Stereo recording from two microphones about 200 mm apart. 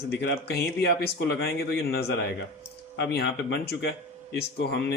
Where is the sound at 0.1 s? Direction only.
55° left (ahead or behind).